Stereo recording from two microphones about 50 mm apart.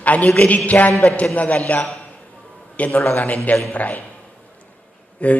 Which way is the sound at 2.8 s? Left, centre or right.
Left.